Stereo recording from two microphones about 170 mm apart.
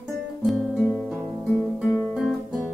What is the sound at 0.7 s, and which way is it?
Music, 10° left (ahead or behind).